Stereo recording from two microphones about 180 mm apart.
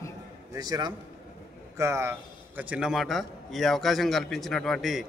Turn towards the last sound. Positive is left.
turn(degrees=0)  # may be behind; listen again after turning